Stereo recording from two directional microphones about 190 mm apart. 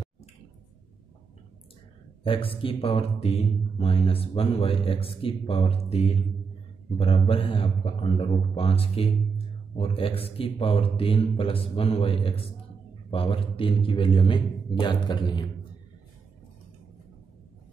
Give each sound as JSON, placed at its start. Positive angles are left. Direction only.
{"t": 2.2, "sound": "speech", "side_deg": 25}
{"t": 7.0, "sound": "a man's voice", "side_deg": 30}